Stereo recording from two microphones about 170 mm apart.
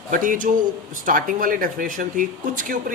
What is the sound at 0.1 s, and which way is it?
Speech, 50° right (ahead or behind).